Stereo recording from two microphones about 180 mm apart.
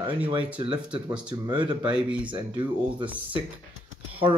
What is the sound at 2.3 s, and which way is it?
Speech, 25° right (ahead or behind).